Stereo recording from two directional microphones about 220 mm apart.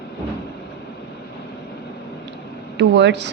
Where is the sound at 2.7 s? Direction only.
50° right (ahead or behind).